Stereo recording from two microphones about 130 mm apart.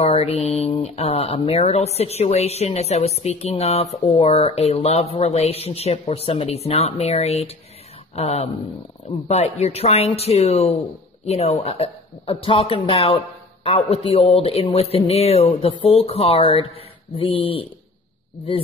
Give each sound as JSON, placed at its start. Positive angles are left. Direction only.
{"t": 0.0, "sound": "speech", "side_deg": 50}